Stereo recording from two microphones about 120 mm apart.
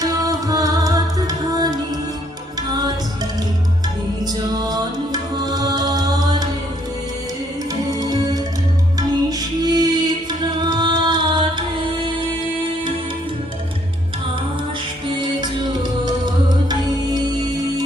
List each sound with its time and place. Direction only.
0.0 s music: 30° right (ahead or behind)
4.3 s music: 35° right (ahead or behind)
7.9 s music: 30° right (ahead or behind)
15.4 s music: 35° right (ahead or behind)